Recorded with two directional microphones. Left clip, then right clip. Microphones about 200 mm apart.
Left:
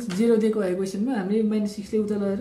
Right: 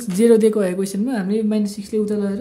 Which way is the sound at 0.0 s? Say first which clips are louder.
Right 8 dB; 45° right (ahead or behind).